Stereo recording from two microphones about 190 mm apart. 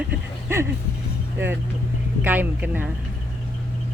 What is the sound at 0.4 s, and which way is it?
Music, 15° right (ahead or behind).